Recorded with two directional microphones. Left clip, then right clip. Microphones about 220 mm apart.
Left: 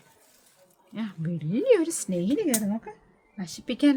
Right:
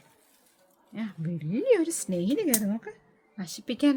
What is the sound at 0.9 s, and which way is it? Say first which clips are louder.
Speech: left 2 dB; 5° right (ahead or behind).